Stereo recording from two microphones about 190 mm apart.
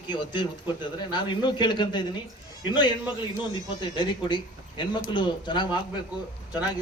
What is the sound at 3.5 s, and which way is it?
A man's voice, 25° left (ahead or behind).